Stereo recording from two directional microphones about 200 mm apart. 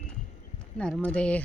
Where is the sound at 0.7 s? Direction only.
5° left (ahead or behind).